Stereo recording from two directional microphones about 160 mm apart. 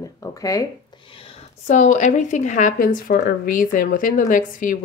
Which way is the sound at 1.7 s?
50° left (ahead or behind).